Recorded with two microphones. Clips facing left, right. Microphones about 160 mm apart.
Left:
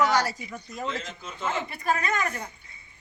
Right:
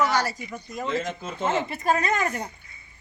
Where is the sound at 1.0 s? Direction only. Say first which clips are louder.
Right 8 dB; 50° right (ahead or behind).